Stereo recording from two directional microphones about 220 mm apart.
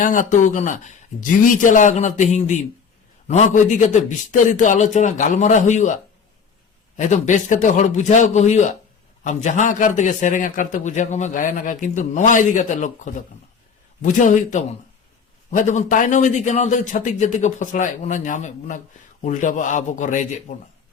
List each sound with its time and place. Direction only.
0.0 s a man's voice: 35° left (ahead or behind)
14.0 s a man's voice: 35° left (ahead or behind)